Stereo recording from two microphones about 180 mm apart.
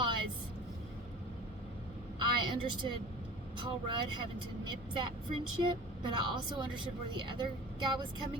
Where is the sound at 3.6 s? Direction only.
25° right (ahead or behind).